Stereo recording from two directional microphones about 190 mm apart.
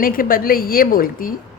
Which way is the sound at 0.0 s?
50° left (ahead or behind).